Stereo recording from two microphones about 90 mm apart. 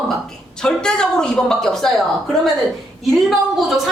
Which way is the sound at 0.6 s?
10° left (ahead or behind).